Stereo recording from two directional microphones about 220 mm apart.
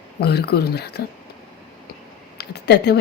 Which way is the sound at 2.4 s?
50° left (ahead or behind).